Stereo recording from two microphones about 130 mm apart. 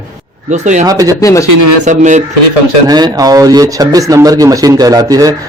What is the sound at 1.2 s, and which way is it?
Speech, 25° left (ahead or behind).